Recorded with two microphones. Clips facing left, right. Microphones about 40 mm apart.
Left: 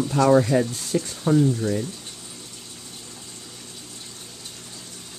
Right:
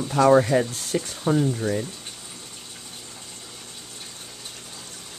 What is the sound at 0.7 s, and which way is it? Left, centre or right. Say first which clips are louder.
Speech: left 1 dB; centre.